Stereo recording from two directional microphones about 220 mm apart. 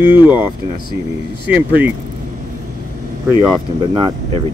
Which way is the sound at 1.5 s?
10° right (ahead or behind).